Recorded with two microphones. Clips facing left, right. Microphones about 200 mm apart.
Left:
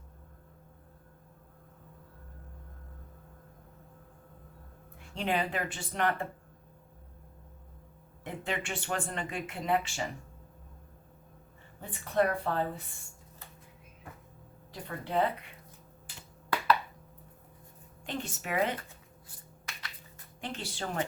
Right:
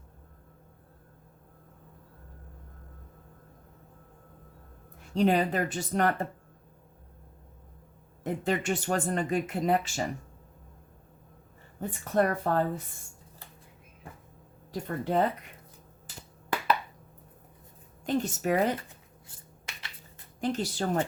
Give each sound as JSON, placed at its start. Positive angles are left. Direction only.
{"t": 5.1, "sound": "speech", "side_deg": -40}
{"t": 8.2, "sound": "speech", "side_deg": -40}
{"t": 11.8, "sound": "a woman's voice", "side_deg": -45}
{"t": 14.7, "sound": "a woman's voice", "side_deg": -45}
{"t": 18.0, "sound": "speech", "side_deg": -40}
{"t": 20.4, "sound": "speech", "side_deg": -40}